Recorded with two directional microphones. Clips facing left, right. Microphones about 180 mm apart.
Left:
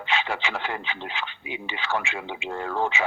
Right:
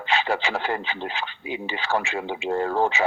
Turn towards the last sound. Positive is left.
turn(degrees=-40)  # may be behind; listen again after turning